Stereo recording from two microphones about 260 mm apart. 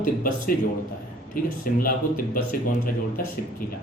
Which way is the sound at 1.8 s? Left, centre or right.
Left.